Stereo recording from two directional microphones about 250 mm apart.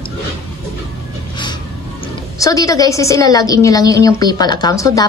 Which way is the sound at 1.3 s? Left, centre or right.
Centre.